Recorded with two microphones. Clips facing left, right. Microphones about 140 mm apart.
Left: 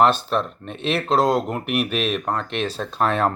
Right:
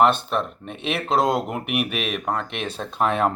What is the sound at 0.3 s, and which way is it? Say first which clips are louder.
Speech: left 2 dB; 10° right (ahead or behind).